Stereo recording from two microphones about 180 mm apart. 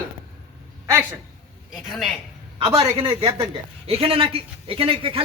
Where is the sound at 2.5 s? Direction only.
30° right (ahead or behind).